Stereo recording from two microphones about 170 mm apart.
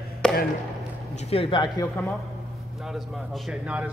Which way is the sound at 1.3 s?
30° left (ahead or behind).